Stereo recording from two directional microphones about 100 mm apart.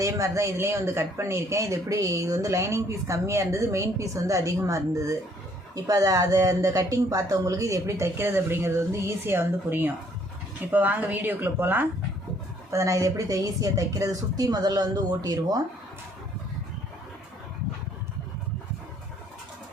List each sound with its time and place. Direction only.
0.0 s speech: 30° right (ahead or behind)
12.7 s speech: 30° right (ahead or behind)